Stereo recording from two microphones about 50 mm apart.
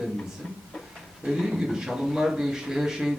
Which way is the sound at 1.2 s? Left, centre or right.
Centre.